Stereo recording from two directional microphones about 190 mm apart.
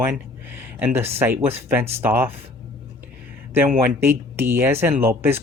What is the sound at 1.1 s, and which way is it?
Speech, 10° right (ahead or behind).